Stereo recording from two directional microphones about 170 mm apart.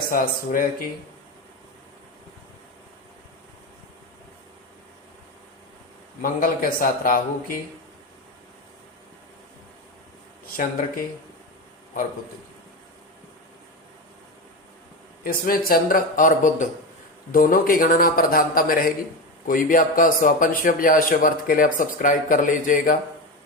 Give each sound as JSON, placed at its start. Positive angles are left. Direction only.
{"t": 0.1, "sound": "a man's voice", "side_deg": 55}
{"t": 6.2, "sound": "a man's voice", "side_deg": 55}
{"t": 10.4, "sound": "speech", "side_deg": 60}
{"t": 15.2, "sound": "a man's voice", "side_deg": 55}